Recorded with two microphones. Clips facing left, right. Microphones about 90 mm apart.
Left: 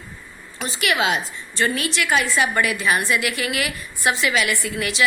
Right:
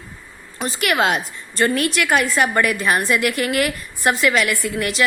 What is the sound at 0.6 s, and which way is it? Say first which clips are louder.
A woman's voice: right 3 dB; 45° right (ahead or behind).